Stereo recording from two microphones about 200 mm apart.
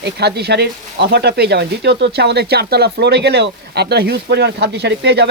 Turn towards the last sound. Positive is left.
turn(degrees=-55)  # may be behind; listen again after turning